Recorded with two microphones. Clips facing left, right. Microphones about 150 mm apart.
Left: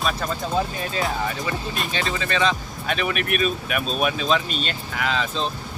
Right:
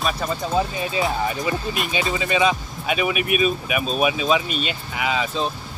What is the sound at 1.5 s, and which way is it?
Speech, 15° right (ahead or behind).